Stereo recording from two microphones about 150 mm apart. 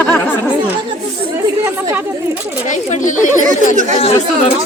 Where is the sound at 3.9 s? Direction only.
40° left (ahead or behind).